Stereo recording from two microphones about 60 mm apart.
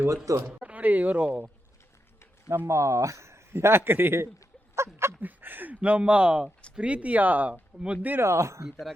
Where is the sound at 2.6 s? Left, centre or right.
Right.